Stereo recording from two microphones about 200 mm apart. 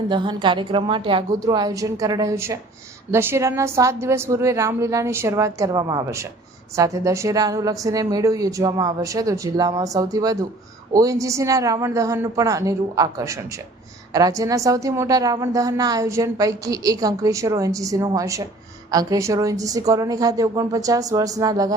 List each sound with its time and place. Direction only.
0.1 s a woman's voice: 25° right (ahead or behind)